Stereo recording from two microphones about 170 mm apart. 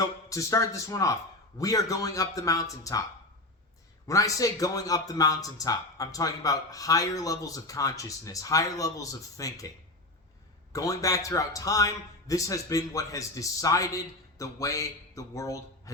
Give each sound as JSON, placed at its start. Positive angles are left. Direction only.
{"t": 0.0, "sound": "a man's voice", "side_deg": 20}
{"t": 4.0, "sound": "a man's voice", "side_deg": 20}
{"t": 10.7, "sound": "a man's voice", "side_deg": 20}